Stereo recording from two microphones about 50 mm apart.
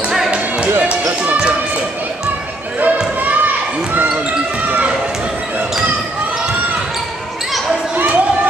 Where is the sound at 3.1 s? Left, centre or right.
Right.